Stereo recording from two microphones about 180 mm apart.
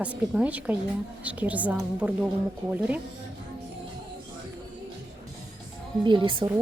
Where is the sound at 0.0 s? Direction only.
5° right (ahead or behind).